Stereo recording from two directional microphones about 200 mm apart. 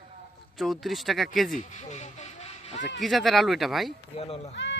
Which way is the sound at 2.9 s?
Centre (ahead or behind).